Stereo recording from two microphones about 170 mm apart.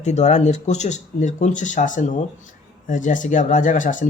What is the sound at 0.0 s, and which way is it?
Speech, 40° left (ahead or behind).